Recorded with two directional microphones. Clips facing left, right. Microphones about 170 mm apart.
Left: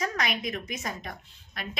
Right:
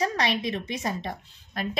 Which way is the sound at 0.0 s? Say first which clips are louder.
Right 4 dB; 30° right (ahead or behind).